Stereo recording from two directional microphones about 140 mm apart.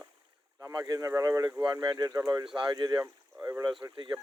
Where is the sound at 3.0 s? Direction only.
20° right (ahead or behind).